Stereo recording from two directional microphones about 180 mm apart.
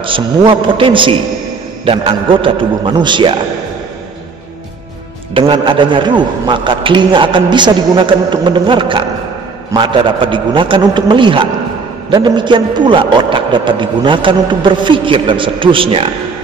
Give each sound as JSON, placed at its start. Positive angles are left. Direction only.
{"t": 0.0, "sound": "a man's voice", "side_deg": -30}
{"t": 5.3, "sound": "a man's voice", "side_deg": -30}